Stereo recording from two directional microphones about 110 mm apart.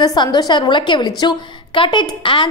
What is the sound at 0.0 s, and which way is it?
A woman's voice, 40° left (ahead or behind).